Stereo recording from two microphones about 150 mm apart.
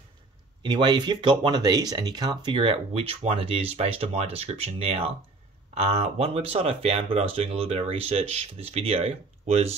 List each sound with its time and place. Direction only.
0.6 s speech: 30° right (ahead or behind)